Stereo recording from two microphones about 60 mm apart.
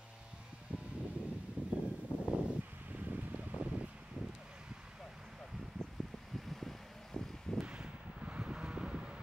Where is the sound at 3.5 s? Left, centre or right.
Centre.